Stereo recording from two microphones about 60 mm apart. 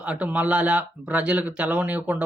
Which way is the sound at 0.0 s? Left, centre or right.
Right.